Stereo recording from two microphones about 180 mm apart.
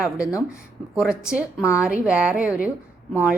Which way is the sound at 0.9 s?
5° right (ahead or behind).